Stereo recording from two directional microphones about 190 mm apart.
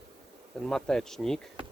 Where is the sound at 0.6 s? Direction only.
5° left (ahead or behind).